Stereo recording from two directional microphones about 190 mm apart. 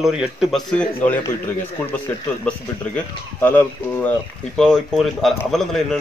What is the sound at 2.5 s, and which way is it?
Speech, 5° left (ahead or behind).